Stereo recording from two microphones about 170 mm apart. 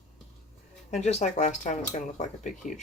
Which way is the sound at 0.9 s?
40° left (ahead or behind).